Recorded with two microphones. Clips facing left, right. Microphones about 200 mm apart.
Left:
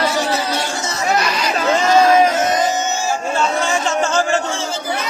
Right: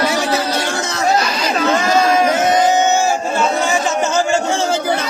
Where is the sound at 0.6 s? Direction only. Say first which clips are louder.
Right 3 dB; 70° right (ahead or behind).